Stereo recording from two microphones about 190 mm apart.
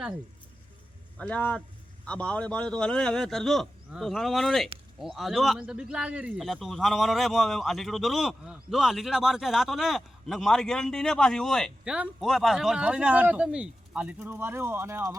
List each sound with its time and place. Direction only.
1.2 s a man's voice: 5° left (ahead or behind); by 15.1 s 15° right (ahead or behind)